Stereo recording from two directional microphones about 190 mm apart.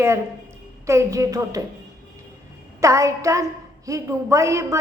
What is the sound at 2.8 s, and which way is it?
A woman's voice, 15° right (ahead or behind).